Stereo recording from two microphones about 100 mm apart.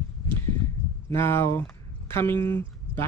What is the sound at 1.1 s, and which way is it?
Speech, 25° left (ahead or behind).